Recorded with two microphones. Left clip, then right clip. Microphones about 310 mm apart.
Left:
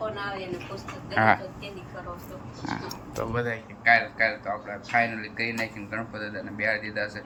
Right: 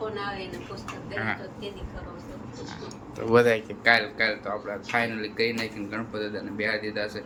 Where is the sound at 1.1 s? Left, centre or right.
Centre.